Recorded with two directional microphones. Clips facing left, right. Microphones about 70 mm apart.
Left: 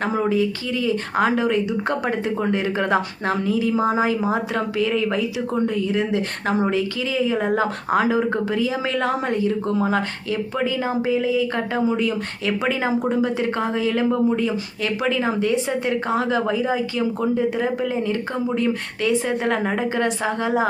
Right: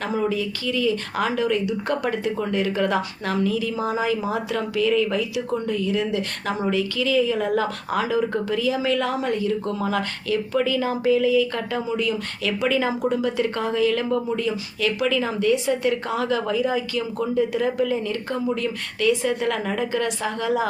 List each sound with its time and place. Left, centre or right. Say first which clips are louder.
0.0 s speech: left 4 dB; left